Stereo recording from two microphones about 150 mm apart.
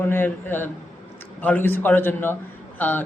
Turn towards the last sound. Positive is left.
turn(degrees=10)  # may be behind; listen again after turning